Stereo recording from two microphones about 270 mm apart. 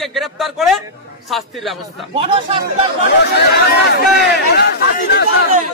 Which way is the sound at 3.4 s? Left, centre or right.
Left.